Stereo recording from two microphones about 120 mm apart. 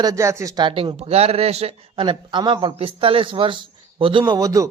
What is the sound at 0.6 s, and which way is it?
Speech, 40° right (ahead or behind).